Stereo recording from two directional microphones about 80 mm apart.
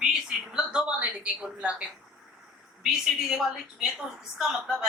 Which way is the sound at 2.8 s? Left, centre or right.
Centre.